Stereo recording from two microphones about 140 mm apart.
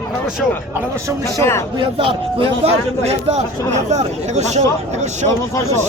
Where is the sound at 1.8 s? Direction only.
40° right (ahead or behind).